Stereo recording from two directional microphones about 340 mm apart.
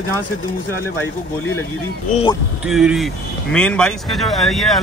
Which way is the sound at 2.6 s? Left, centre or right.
Centre.